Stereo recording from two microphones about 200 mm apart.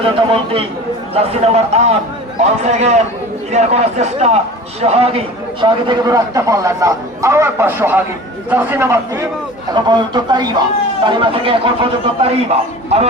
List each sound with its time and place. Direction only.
0.0 s a man's voice: 25° right (ahead or behind); by 9.0 s 10° right (ahead or behind)
9.7 s a man's voice: 20° right (ahead or behind)